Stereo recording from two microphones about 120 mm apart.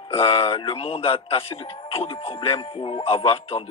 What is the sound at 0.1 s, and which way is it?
Speech, 50° left (ahead or behind).